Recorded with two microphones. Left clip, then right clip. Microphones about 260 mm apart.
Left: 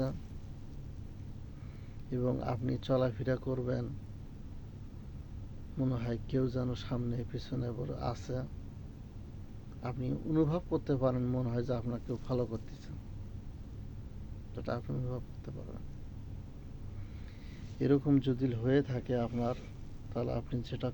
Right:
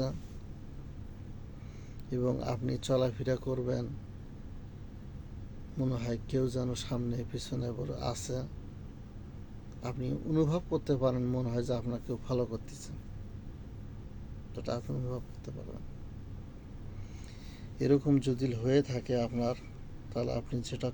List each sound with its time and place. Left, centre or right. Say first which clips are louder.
2.0 s speech: right 2 dB; centre
5.7 s speech: right 1 dB; centre
9.8 s speech: right 1 dB; centre
14.5 s speech: right 2 dB; centre
17.7 s speech: right 1 dB; centre